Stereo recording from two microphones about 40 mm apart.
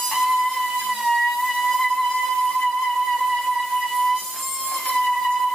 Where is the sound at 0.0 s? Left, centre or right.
Centre.